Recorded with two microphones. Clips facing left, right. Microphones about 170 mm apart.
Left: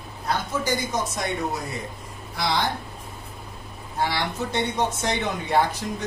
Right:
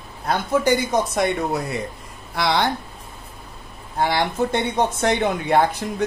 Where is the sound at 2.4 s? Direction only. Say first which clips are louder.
Right 5 dB; 65° right (ahead or behind).